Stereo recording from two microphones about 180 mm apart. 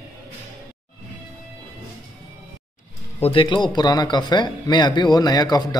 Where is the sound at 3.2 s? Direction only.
30° left (ahead or behind).